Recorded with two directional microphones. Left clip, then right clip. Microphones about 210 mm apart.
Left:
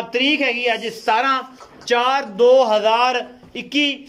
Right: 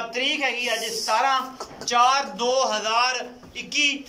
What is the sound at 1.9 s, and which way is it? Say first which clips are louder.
A man's voice: left 2 dB; 40° left (ahead or behind).